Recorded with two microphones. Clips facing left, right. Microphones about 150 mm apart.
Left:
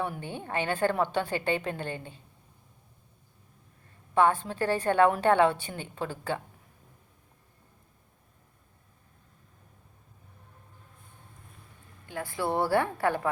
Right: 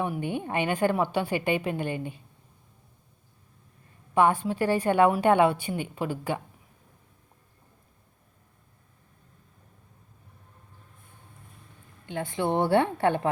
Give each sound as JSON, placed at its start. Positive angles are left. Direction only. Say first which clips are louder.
{"t": 0.0, "sound": "a woman's voice", "louder": "right 5 dB", "side_deg": -15}
{"t": 4.1, "sound": "a woman's voice", "louder": "right 2 dB", "side_deg": -15}
{"t": 12.0, "sound": "a woman's voice", "louder": "right 3 dB", "side_deg": -20}